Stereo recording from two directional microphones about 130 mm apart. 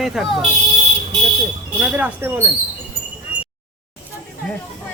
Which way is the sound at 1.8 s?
15° right (ahead or behind).